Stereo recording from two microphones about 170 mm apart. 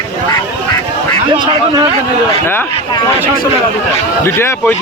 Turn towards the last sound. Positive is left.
turn(degrees=15)  # may be behind; listen again after turning